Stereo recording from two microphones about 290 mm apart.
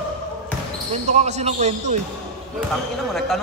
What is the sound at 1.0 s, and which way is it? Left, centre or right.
Speech, right.